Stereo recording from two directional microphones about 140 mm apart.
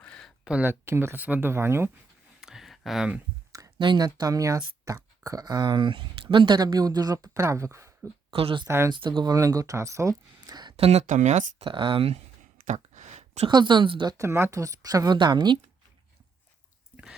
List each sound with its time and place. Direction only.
0.1 s a sound: 5° left (ahead or behind)
0.4 s speech: 10° right (ahead or behind)
2.4 s a sound: 5° right (ahead or behind)
3.5 s speech: 30° right (ahead or behind)
8.3 s speech: 40° right (ahead or behind)
8.6 s speech: 20° right (ahead or behind)
8.9 s speech: 35° right (ahead or behind)
10.8 s speech: 45° right (ahead or behind)
11.0 s speech: 60° right (ahead or behind)
11.6 s speech: 40° right (ahead or behind)
12.6 s a sound: 60° right (ahead or behind)
13.5 s speech: 30° right (ahead or behind)
14.2 s speech: 20° right (ahead or behind)